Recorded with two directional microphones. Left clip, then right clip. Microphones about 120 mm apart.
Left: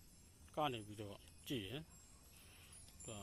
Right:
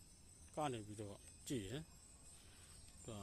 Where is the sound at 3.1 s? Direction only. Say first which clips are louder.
Left 1 dB; 35° right (ahead or behind).